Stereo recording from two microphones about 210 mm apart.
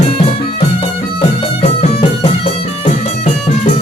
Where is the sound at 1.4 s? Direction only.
30° left (ahead or behind).